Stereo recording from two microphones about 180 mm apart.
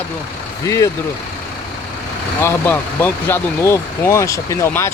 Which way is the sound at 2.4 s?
10° left (ahead or behind).